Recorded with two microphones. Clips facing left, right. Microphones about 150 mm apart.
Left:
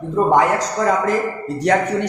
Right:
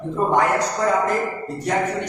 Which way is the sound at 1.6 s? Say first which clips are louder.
Left 6 dB; 75° left (ahead or behind).